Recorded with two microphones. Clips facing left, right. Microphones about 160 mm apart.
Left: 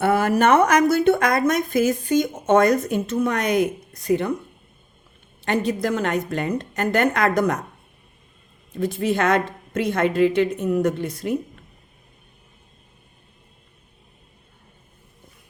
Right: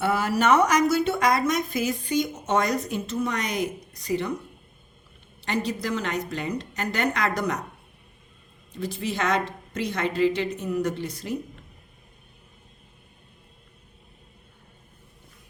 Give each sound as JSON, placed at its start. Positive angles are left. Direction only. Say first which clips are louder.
{"t": 0.0, "sound": "a woman's voice", "louder": "left 5 dB", "side_deg": 55}
{"t": 5.5, "sound": "a woman's voice", "louder": "left 5 dB", "side_deg": 50}
{"t": 8.7, "sound": "a woman's voice", "louder": "left 8 dB", "side_deg": 55}